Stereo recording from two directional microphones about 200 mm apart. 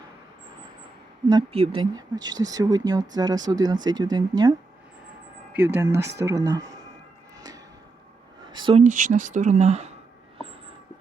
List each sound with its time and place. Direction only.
1.3 s speech: 25° right (ahead or behind)
5.5 s speech: 10° right (ahead or behind)
8.5 s speech: 25° right (ahead or behind)
8.8 s speech: 40° right (ahead or behind)